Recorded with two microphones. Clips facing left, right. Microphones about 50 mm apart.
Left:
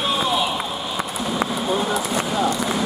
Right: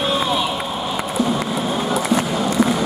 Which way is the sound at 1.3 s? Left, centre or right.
Centre.